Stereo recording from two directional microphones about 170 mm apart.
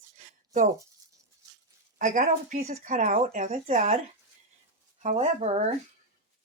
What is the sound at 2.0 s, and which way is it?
Speech, 55° right (ahead or behind).